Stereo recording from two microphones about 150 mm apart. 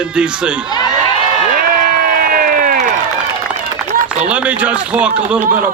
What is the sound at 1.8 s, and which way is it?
Crowd, 70° right (ahead or behind).